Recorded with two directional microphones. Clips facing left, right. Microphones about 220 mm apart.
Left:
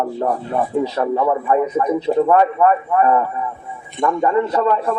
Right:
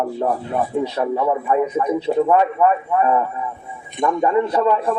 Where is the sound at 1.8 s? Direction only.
5° right (ahead or behind).